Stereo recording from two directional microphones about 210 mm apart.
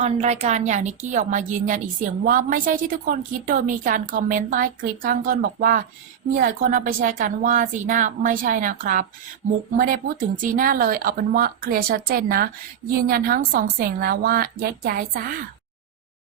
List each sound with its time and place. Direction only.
0.0 s a woman's voice: 30° right (ahead or behind)